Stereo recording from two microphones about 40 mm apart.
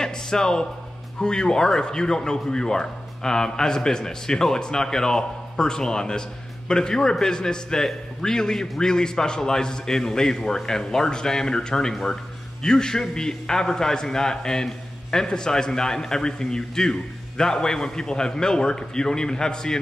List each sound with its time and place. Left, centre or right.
0.0 s music: centre
1.2 s a man's voice: centre